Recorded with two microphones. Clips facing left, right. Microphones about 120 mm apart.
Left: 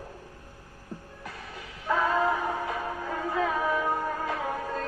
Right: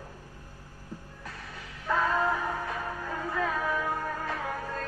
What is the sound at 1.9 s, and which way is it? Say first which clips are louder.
Music: left 2 dB; 15° left (ahead or behind).